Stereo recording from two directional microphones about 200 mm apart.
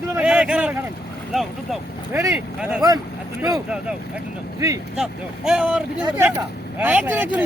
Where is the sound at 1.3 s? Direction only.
Centre (ahead or behind).